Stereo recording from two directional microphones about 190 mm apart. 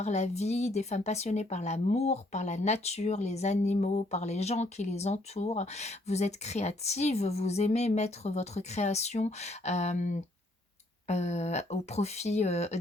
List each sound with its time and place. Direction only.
0.0 s speech: 35° left (ahead or behind)